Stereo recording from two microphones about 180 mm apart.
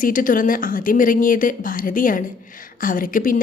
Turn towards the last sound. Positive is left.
turn(degrees=50)  # may be behind; listen again after turning